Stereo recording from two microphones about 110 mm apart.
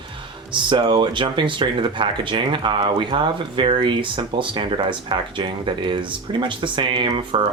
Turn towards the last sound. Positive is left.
turn(degrees=-50)  # may be behind; listen again after turning